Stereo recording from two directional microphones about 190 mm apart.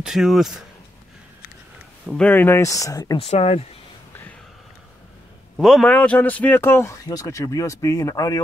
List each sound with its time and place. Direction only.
0.0 s speech: centre (ahead or behind)
2.0 s speech: 5° left (ahead or behind)
3.2 s speech: 30° left (ahead or behind)
5.6 s speech: centre (ahead or behind); by 8.4 s 20° left (ahead or behind)